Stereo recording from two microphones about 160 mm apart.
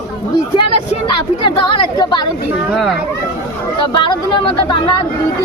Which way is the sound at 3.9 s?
30° left (ahead or behind).